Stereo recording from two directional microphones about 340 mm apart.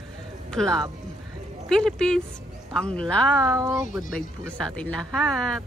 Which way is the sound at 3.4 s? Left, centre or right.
Centre.